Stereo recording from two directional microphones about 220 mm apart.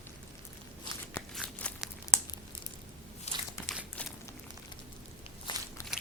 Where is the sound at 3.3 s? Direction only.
30° left (ahead or behind).